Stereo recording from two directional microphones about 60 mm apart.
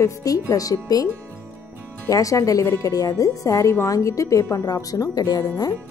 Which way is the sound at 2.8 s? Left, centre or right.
Left.